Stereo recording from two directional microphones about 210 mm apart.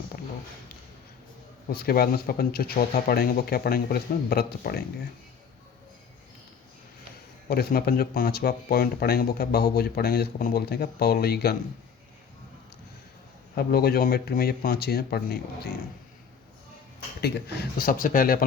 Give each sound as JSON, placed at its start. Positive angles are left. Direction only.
{"t": 1.6, "sound": "speech", "side_deg": 45}
{"t": 7.4, "sound": "speech", "side_deg": 45}
{"t": 13.6, "sound": "speech", "side_deg": 45}
{"t": 17.2, "sound": "speech", "side_deg": 50}